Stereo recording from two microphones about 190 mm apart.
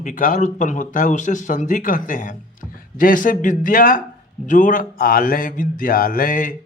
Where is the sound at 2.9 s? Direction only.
45° left (ahead or behind).